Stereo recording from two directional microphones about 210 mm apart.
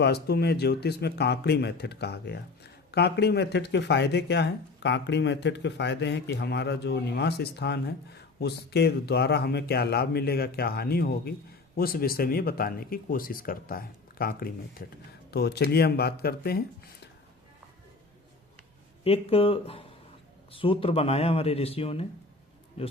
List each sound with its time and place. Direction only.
0.0 s speech: 50° left (ahead or behind)
19.0 s a man's voice: 30° left (ahead or behind)